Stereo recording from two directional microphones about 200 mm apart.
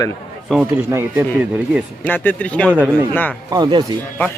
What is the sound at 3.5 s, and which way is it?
Speech, 20° right (ahead or behind).